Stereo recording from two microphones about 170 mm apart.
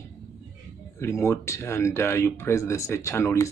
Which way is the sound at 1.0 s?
15° left (ahead or behind).